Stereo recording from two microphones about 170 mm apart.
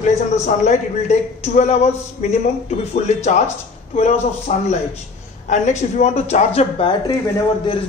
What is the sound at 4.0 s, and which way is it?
A man's voice, 40° left (ahead or behind).